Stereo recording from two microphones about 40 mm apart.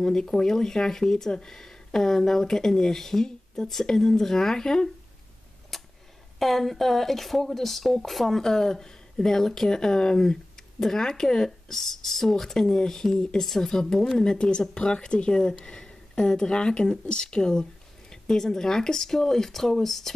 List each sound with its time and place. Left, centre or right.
0.0 s speech: centre
5.7 s a sound: centre
6.4 s speech: centre